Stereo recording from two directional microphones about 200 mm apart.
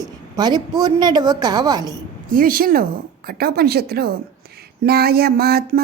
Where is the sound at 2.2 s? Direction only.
45° right (ahead or behind).